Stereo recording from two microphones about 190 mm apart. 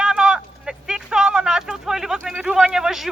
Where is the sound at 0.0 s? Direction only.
5° right (ahead or behind).